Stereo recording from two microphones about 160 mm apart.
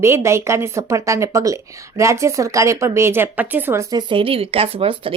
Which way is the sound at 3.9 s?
30° right (ahead or behind).